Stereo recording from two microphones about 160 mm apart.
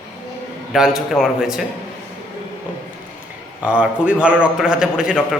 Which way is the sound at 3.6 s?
5° right (ahead or behind).